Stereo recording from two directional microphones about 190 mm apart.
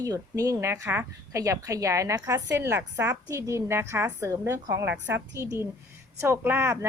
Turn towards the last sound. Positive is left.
turn(degrees=-10)  # may be behind; listen again after turning